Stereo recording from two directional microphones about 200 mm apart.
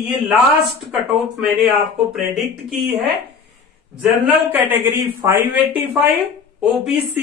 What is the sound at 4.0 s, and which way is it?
A woman's voice, 5° right (ahead or behind).